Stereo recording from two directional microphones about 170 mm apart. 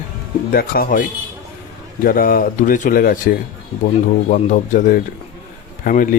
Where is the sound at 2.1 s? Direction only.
55° left (ahead or behind).